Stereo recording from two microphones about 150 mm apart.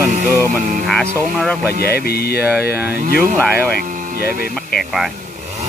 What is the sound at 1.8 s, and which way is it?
Speech, 90° left.